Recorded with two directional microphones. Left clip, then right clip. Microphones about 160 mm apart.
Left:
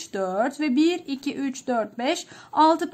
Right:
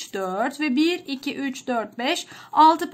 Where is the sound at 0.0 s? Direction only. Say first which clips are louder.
Left 1 dB; 35° left (ahead or behind).